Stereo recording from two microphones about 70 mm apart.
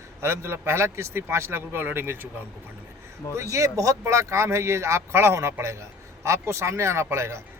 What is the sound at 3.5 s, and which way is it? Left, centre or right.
A man's voice, right.